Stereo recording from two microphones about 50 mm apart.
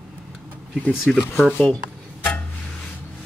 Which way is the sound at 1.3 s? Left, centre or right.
Left.